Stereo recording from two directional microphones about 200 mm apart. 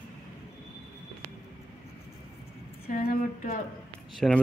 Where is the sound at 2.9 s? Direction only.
45° left (ahead or behind).